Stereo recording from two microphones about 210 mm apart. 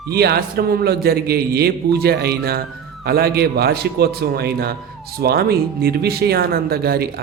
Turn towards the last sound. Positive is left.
turn(degrees=-45)  # may be behind; listen again after turning